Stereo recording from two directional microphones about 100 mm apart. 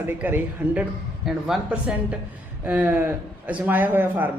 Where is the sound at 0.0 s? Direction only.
20° right (ahead or behind).